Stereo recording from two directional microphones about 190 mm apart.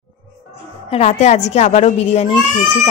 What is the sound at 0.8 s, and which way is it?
A woman's voice, 35° left (ahead or behind).